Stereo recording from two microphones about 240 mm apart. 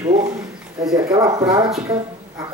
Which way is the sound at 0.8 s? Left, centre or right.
Centre.